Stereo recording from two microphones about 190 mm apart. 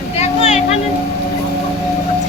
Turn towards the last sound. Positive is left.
turn(degrees=35)  # may be behind; listen again after turning